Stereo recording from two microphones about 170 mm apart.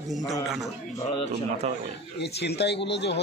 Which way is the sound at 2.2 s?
85° left.